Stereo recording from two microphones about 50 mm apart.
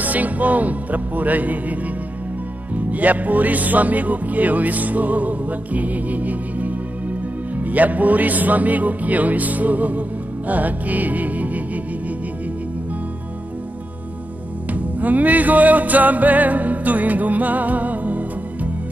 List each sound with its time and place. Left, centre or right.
0.0 s music: right
14.7 s music: right